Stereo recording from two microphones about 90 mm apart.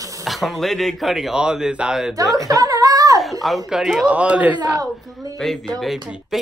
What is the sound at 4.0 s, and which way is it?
Speech, 15° right (ahead or behind).